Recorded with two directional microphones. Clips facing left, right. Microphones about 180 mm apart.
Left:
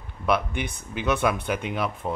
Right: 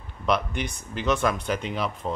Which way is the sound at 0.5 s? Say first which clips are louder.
Even; 55° left (ahead or behind).